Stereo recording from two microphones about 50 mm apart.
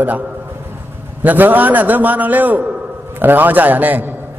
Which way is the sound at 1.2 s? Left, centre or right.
Right.